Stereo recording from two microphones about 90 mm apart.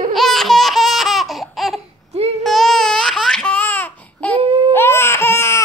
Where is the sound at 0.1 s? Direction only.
5° left (ahead or behind).